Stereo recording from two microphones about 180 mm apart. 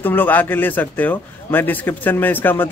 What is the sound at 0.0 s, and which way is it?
A man's voice, 10° left (ahead or behind).